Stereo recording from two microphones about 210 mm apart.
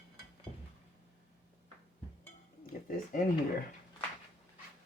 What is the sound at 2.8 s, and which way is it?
Speech, 40° left (ahead or behind).